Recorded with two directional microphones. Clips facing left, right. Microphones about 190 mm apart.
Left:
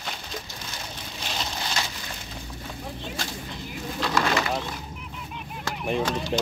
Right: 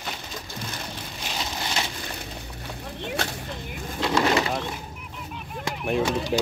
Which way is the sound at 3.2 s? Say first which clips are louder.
Right 5 dB; 70° right (ahead or behind).